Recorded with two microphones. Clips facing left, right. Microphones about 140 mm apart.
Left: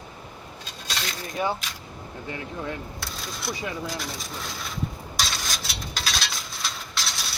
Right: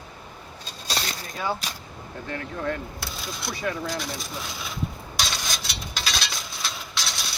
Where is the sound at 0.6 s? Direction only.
35° right (ahead or behind).